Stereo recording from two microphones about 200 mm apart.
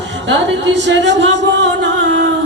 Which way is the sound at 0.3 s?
65° right (ahead or behind).